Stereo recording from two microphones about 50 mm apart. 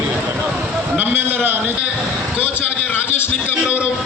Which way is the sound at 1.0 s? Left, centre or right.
Right.